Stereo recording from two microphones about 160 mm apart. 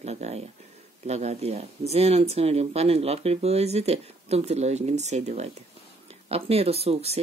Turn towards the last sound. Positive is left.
turn(degrees=-40)  # may be behind; listen again after turning